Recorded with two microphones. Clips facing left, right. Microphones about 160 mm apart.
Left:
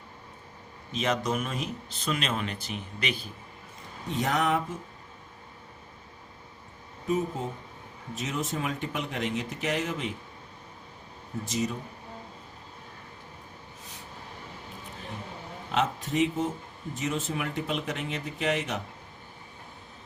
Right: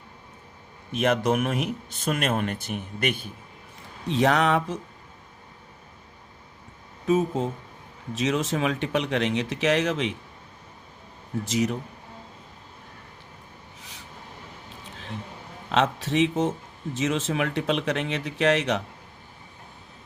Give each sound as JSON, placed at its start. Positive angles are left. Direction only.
{"t": 0.9, "sound": "speech", "side_deg": -55}
{"t": 4.1, "sound": "speech", "side_deg": -80}
{"t": 7.1, "sound": "speech", "side_deg": -90}
{"t": 11.4, "sound": "speech", "side_deg": -75}
{"t": 15.7, "sound": "speech", "side_deg": -85}